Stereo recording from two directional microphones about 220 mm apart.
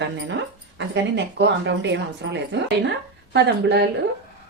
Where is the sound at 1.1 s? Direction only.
50° right (ahead or behind).